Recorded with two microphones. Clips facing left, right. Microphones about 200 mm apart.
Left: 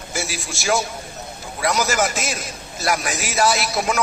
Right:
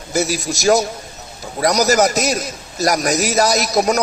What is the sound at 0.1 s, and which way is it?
A man's voice, 40° right (ahead or behind).